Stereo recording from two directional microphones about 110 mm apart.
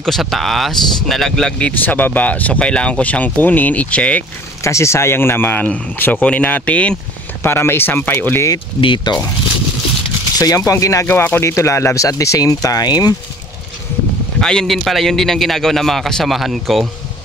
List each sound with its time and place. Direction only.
0.0 s a man's voice: centre (ahead or behind)
1.7 s speech: 15° left (ahead or behind)
4.6 s speech: 25° left (ahead or behind)
8.8 s speech: 45° left (ahead or behind)
10.4 s speech: 30° left (ahead or behind)
11.1 s speech: 20° left (ahead or behind); by 13.1 s 35° left (ahead or behind)
14.4 s a man's voice: 5° left (ahead or behind)